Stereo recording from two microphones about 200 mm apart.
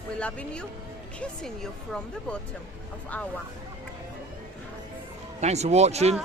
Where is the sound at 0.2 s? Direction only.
5° left (ahead or behind).